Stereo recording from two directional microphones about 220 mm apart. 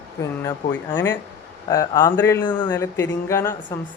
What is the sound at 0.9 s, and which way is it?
Speech, 10° left (ahead or behind).